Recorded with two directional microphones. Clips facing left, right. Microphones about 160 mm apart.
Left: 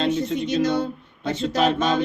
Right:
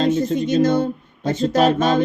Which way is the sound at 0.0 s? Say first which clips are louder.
Right 4 dB; 45° right (ahead or behind).